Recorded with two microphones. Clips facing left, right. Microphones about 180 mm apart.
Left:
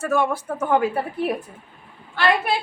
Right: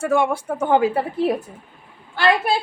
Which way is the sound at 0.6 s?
30° right (ahead or behind).